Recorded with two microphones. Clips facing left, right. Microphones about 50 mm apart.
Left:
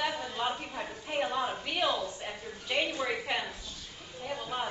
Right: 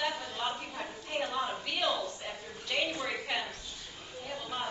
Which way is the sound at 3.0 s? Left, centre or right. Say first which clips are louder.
Left 2 dB; centre.